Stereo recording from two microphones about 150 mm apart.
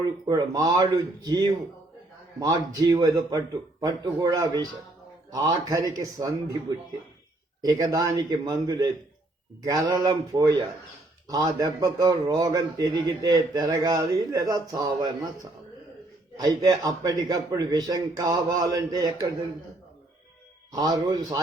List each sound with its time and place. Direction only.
0.0 s a man's voice: 25° right (ahead or behind)
16.4 s a man's voice: 25° right (ahead or behind)
20.7 s a man's voice: 25° right (ahead or behind)